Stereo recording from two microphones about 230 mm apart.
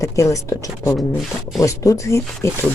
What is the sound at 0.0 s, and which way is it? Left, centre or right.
Speech, centre.